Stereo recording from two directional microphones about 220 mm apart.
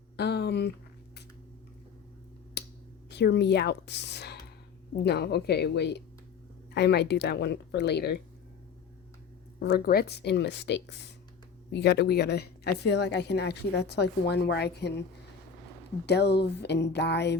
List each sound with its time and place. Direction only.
0.2 s a woman's voice: 50° left (ahead or behind)
2.6 s finger snapping: 50° left (ahead or behind)
3.1 s a woman's voice: 50° left (ahead or behind)
9.6 s a woman's voice: 45° left (ahead or behind)
16.0 s a woman's voice: 50° left (ahead or behind)